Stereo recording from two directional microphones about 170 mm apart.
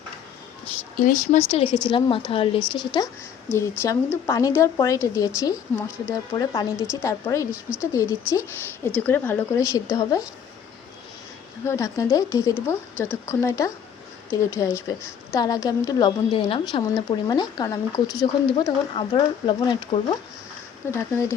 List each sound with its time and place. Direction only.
0.9 s speech: 50° left (ahead or behind); by 7.4 s 20° left (ahead or behind)
7.5 s speech: 5° right (ahead or behind)
7.9 s speech: 15° left (ahead or behind)
11.6 s speech: 15° left (ahead or behind)
20.9 s speech: 15° left (ahead or behind)